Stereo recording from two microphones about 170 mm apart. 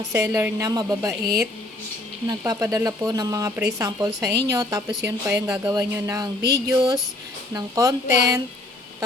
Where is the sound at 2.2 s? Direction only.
20° right (ahead or behind).